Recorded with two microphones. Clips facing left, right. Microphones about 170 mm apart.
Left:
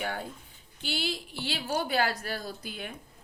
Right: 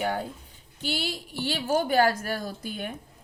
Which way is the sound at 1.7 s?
50° right (ahead or behind).